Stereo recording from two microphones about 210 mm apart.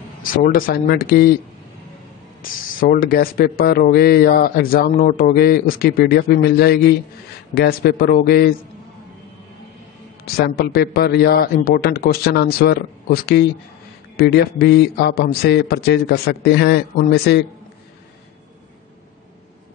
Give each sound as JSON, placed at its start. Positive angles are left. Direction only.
{"t": 0.2, "sound": "speech", "side_deg": 45}
{"t": 2.8, "sound": "speech", "side_deg": 45}
{"t": 10.2, "sound": "speech", "side_deg": 45}